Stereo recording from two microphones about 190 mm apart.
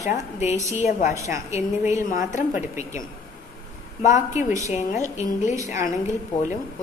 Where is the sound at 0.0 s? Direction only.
35° left (ahead or behind).